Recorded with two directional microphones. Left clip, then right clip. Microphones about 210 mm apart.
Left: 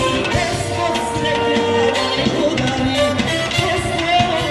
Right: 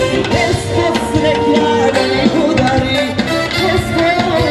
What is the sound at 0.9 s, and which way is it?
Music, 25° right (ahead or behind).